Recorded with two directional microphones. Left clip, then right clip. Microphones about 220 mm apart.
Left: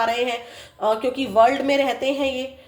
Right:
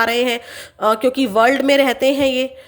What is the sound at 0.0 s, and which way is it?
Speech, 40° right (ahead or behind).